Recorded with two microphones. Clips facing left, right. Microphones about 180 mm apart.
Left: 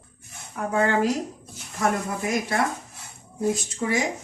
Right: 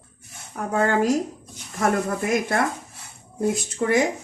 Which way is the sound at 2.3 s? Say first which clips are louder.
Even; 55° right (ahead or behind).